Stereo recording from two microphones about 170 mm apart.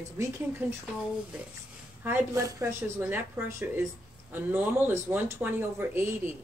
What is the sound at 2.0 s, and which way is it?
Speech, 15° right (ahead or behind).